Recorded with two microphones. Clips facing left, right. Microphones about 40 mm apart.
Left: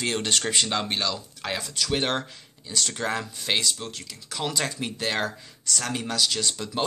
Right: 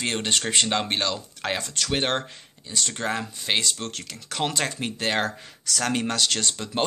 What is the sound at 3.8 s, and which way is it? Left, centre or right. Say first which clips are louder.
Speech: right 3 dB; right.